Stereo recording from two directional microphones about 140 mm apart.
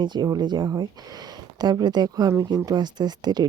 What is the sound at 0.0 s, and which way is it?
Speech, 30° right (ahead or behind).